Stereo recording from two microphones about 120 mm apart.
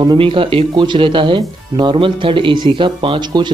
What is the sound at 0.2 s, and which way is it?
Speech, 50° right (ahead or behind).